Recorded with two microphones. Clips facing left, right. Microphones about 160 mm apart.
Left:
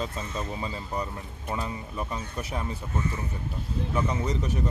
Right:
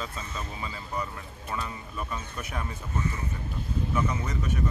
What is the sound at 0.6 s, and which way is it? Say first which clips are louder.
Speech: left 2 dB; 30° left (ahead or behind).